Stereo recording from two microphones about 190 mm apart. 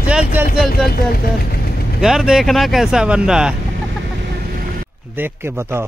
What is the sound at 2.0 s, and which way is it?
Speech, 5° right (ahead or behind).